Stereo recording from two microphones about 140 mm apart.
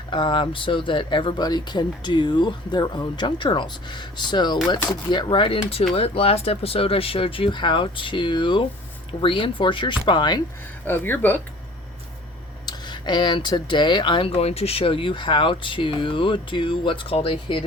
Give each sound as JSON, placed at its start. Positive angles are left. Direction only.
{"t": 0.1, "sound": "speech", "side_deg": 35}
{"t": 10.8, "sound": "speech", "side_deg": 15}
{"t": 12.6, "sound": "speech", "side_deg": 30}